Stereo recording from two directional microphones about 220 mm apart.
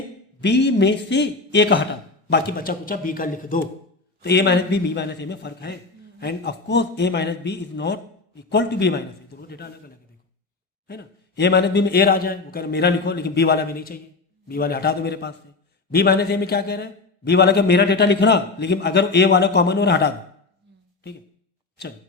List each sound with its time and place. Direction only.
0.4 s a man's voice: 50° left (ahead or behind)
4.2 s a man's voice: 50° left (ahead or behind)
10.8 s a man's voice: 50° left (ahead or behind)